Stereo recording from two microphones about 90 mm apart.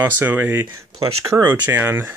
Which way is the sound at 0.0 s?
20° right (ahead or behind).